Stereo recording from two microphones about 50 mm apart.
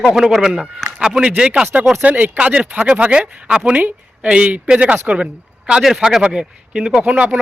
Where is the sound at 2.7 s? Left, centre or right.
Right.